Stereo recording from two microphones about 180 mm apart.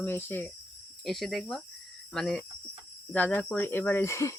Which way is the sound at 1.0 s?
Centre (ahead or behind).